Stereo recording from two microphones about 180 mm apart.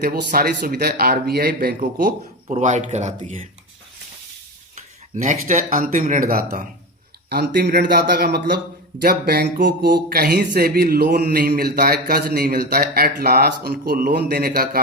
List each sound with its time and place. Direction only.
0.0 s speech: 55° right (ahead or behind)
4.7 s cutlery: 45° right (ahead or behind)
5.7 s speech: 50° right (ahead or behind)
7.3 s a man's voice: 65° right (ahead or behind)